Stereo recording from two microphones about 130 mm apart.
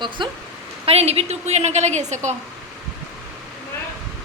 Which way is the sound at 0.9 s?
50° right (ahead or behind).